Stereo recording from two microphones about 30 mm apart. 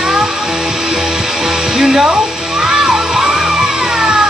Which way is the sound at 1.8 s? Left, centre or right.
Centre.